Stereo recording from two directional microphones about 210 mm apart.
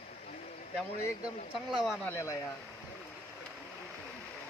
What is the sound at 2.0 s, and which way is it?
Speech, 15° left (ahead or behind).